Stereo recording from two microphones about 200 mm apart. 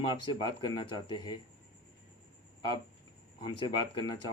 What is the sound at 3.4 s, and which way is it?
Speech, 20° left (ahead or behind).